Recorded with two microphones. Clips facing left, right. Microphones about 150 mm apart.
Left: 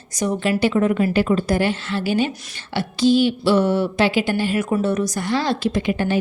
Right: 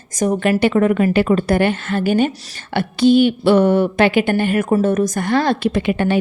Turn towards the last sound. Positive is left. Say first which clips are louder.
# right 3 dB
turn(degrees=-65)  # may be behind; listen again after turning